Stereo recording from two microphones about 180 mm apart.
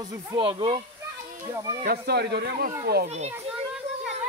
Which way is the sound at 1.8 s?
60° right (ahead or behind).